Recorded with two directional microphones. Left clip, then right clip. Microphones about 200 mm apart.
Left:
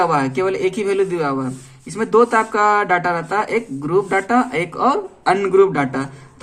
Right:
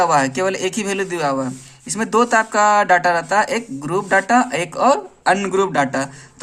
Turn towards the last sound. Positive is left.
turn(degrees=-40)  # may be behind; listen again after turning